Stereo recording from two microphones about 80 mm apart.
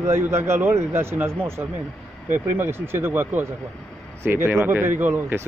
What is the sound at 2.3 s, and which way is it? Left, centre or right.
Speech, right.